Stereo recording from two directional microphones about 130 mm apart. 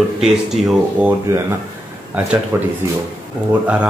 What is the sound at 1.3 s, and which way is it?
Speech, 20° right (ahead or behind).